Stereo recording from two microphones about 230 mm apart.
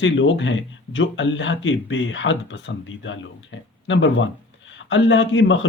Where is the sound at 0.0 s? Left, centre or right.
Left.